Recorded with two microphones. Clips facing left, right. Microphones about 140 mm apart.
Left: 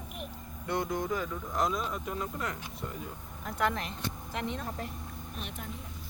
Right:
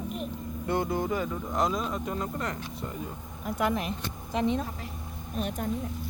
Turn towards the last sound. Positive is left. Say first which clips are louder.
# right 8 dB
turn(degrees=-20)  # may be behind; listen again after turning